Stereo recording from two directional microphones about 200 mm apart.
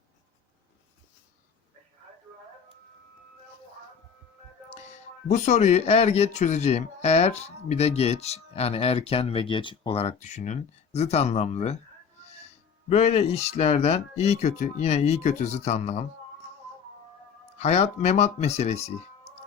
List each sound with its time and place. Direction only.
4.7 s speech: 35° left (ahead or behind)
12.9 s speech: 35° left (ahead or behind)
17.6 s speech: 35° left (ahead or behind)